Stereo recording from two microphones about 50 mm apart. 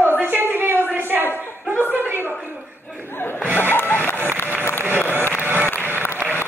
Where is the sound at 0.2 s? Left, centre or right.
Right.